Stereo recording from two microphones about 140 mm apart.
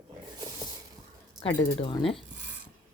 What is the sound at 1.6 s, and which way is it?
Speech, 35° left (ahead or behind).